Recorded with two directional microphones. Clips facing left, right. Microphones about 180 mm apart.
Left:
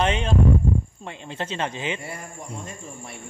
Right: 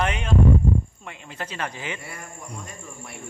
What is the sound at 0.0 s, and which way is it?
Speech, 25° left (ahead or behind).